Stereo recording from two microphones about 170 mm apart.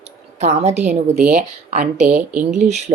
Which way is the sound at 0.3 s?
40° right (ahead or behind).